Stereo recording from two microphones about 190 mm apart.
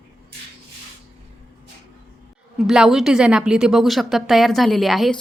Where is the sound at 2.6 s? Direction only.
Centre (ahead or behind).